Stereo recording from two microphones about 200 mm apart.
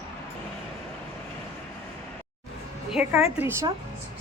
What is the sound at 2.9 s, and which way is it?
Speech, 5° right (ahead or behind).